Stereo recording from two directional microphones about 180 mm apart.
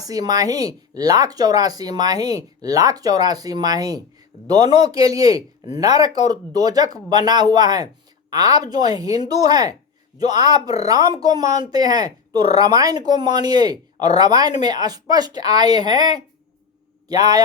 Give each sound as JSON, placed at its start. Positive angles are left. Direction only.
{"t": 0.0, "sound": "speech", "side_deg": -20}